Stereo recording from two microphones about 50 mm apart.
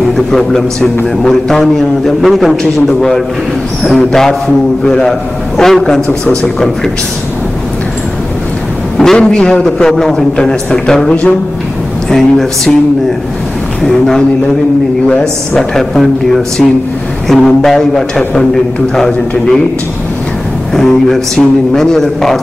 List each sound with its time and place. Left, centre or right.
0.3 s a man's voice: centre
8.9 s a man's voice: centre
11.1 s speech: left
12.1 s a man's voice: centre
13.8 s a man's voice: centre
15.5 s a man's voice: centre
17.3 s a man's voice: centre
20.7 s a man's voice: centre